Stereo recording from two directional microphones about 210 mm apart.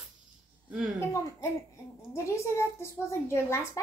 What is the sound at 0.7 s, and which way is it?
Speech, 5° right (ahead or behind).